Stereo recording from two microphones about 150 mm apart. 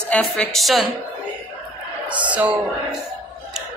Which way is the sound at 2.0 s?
10° right (ahead or behind).